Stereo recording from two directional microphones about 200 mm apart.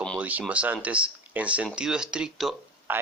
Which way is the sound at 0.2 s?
5° right (ahead or behind).